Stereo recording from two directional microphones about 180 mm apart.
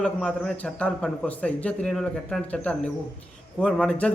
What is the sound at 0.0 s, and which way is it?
A man's voice, 5° left (ahead or behind).